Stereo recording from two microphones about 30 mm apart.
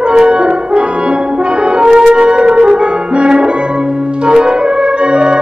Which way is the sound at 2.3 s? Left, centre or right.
Right.